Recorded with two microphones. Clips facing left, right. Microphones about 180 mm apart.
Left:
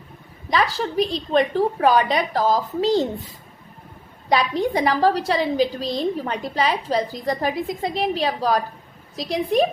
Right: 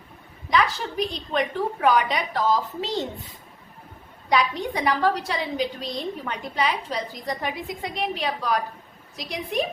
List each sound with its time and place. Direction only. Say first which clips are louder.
0.5 s a woman's voice: left 3 dB; 30° left (ahead or behind)
4.3 s a woman's voice: left 3 dB; 35° left (ahead or behind)